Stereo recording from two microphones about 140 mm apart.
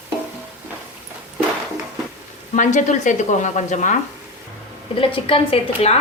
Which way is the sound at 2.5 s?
60° left (ahead or behind).